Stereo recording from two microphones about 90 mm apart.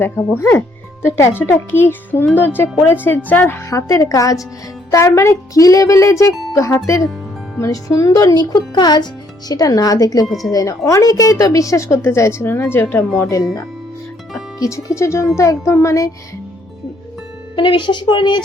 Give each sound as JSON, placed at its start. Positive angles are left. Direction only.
{"t": 0.0, "sound": "speech", "side_deg": 25}
{"t": 3.7, "sound": "a woman's voice", "side_deg": 35}
{"t": 10.2, "sound": "speech", "side_deg": 0}
{"t": 10.5, "sound": "a woman's voice", "side_deg": 40}
{"t": 13.1, "sound": "a woman's voice", "side_deg": 35}
{"t": 14.6, "sound": "a woman's voice", "side_deg": 35}
{"t": 17.5, "sound": "a woman's voice", "side_deg": 65}